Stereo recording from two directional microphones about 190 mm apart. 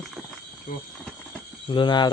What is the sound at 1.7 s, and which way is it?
Speech, 25° left (ahead or behind).